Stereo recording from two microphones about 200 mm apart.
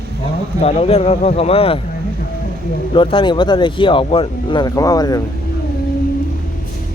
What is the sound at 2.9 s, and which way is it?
Speech, 25° left (ahead or behind).